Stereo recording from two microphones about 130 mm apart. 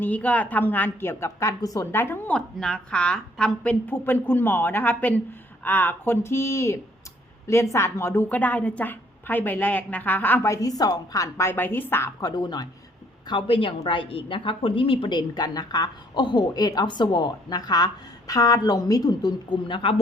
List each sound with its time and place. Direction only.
0.0 s a woman's voice: 10° left (ahead or behind)
12.2 s a woman's voice: 30° left (ahead or behind)